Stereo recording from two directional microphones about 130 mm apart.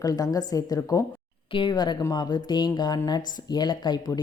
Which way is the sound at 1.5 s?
35° left (ahead or behind).